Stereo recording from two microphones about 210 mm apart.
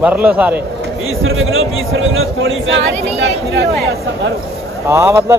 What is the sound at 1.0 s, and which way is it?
A man's voice, 70° right (ahead or behind).